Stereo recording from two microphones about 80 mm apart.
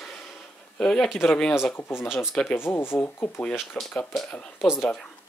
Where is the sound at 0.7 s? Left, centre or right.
Centre.